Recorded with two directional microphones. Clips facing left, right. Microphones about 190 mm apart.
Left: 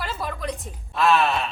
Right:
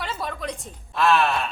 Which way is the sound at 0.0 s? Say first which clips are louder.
Left 1 dB; centre (ahead or behind).